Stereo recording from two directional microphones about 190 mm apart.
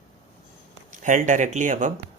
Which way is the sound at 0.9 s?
40° right (ahead or behind).